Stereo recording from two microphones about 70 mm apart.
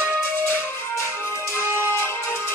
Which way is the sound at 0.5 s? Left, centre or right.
Left.